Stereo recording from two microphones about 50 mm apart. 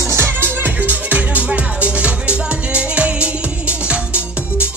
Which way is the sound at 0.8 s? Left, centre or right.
Right.